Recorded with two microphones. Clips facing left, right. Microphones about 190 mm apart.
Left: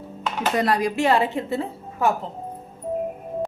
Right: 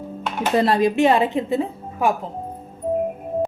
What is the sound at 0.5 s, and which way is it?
Speech, 25° right (ahead or behind).